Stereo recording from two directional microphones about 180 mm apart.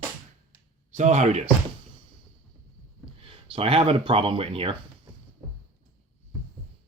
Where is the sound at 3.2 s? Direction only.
30° right (ahead or behind).